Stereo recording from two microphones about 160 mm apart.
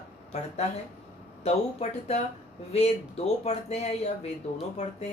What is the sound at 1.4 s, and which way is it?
A woman's voice, 40° left (ahead or behind).